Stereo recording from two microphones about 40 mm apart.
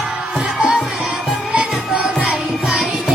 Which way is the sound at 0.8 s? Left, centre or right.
Centre.